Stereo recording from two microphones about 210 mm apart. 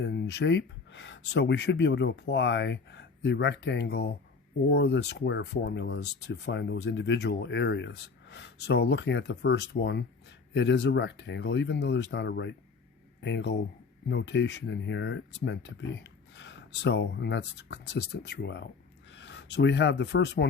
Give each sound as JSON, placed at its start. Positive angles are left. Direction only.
{"t": 0.0, "sound": "speech", "side_deg": 55}